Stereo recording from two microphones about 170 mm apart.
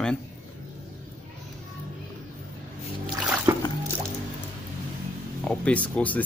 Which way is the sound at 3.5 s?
15° right (ahead or behind).